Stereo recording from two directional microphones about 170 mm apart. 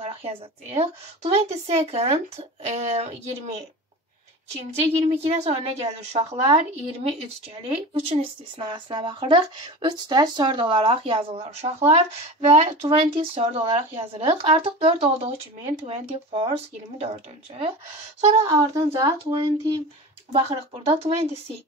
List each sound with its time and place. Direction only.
0.0 s speech: 35° right (ahead or behind)
18.9 s speech: 25° right (ahead or behind)